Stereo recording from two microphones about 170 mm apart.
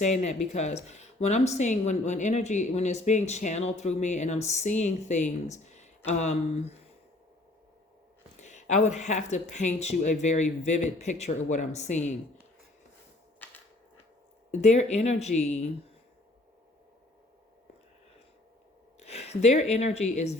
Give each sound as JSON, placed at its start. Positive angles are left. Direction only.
{"t": 0.0, "sound": "speech", "side_deg": 45}
{"t": 8.4, "sound": "speech", "side_deg": 45}
{"t": 14.5, "sound": "speech", "side_deg": 45}
{"t": 18.9, "sound": "speech", "side_deg": 40}